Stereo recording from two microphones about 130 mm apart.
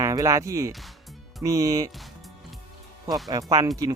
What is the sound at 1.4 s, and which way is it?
Speech, 25° right (ahead or behind).